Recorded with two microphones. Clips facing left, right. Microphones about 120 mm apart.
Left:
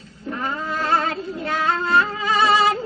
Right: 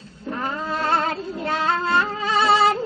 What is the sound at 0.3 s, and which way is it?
Music, 30° right (ahead or behind).